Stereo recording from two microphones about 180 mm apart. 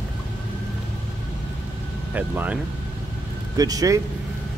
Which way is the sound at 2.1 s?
10° right (ahead or behind).